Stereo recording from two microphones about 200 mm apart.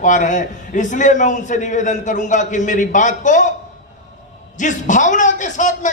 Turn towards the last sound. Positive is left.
turn(degrees=40)  # may be behind; listen again after turning